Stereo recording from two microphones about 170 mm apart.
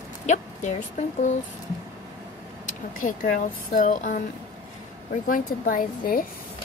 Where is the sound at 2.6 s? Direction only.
50° left (ahead or behind).